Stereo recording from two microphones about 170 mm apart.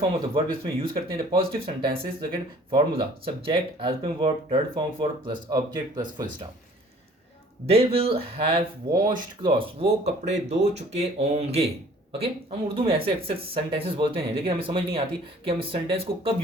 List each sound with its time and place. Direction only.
0.0 s speech: 30° right (ahead or behind)
7.7 s speech: 35° right (ahead or behind)